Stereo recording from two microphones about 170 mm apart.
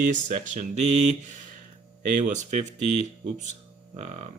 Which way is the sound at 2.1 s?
45° right (ahead or behind).